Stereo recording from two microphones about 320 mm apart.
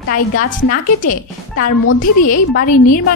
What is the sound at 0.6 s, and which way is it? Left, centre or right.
A woman's voice, left.